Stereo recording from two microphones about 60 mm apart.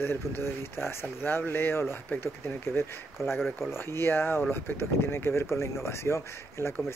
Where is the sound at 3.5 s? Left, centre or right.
Left.